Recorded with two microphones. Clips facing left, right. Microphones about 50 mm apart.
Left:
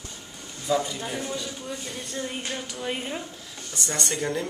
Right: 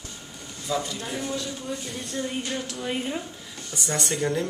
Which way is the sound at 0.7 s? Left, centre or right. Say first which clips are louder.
Left 3 dB; centre.